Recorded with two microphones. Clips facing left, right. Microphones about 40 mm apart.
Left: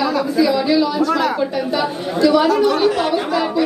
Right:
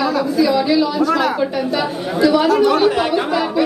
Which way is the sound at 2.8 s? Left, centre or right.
Centre.